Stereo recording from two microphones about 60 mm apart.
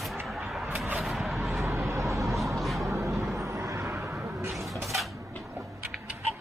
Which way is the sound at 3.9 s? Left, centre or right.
Right.